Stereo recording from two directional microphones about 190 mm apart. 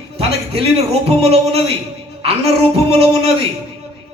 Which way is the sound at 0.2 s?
30° right (ahead or behind).